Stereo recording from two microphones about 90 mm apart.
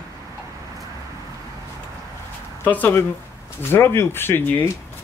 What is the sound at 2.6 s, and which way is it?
Speech, 20° left (ahead or behind).